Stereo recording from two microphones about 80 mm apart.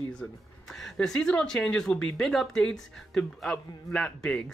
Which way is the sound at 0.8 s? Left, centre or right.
Centre.